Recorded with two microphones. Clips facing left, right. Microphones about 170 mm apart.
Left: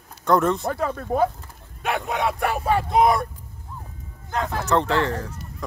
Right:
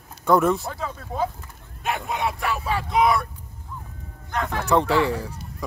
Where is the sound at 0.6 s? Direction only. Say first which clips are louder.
Left 6 dB; 60° left (ahead or behind).